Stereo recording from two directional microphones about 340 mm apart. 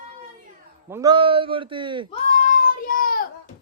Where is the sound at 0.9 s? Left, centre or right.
Centre.